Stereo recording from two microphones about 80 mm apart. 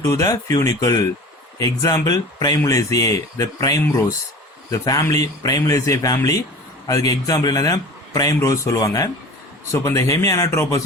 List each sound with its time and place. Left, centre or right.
0.0 s a man's voice: left
10.0 s speech: left